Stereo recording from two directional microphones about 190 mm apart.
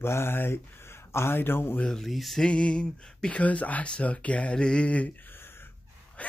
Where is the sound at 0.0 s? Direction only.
10° left (ahead or behind).